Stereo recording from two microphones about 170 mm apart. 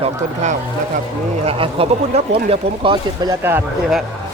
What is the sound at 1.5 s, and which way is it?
Speech, 30° right (ahead or behind).